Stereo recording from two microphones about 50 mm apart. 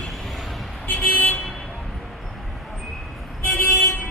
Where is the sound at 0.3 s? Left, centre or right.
Centre.